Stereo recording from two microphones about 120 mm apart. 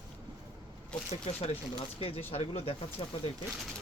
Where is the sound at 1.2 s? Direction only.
55° left (ahead or behind).